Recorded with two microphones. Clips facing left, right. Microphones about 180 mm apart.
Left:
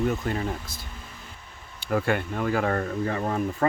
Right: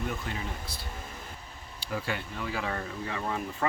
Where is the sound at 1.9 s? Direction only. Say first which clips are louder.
Left 9 dB; 55° left (ahead or behind).